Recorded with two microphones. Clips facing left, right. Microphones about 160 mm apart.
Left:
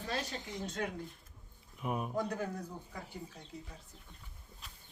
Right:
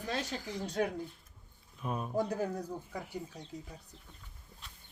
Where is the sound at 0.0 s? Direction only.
25° left (ahead or behind).